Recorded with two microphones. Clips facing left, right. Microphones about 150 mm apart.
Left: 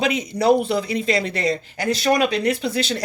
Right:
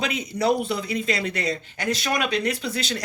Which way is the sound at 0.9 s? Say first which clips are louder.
Left 4 dB; 35° left (ahead or behind).